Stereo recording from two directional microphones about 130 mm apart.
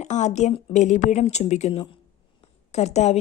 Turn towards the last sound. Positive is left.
turn(degrees=60)  # may be behind; listen again after turning